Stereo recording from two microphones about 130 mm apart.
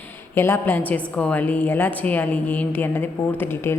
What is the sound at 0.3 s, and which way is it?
A woman's voice, 20° left (ahead or behind).